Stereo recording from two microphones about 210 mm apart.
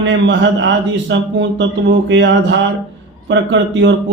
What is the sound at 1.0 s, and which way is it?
A man's voice, 60° right (ahead or behind).